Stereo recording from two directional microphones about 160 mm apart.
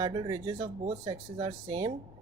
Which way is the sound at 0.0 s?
30° right (ahead or behind).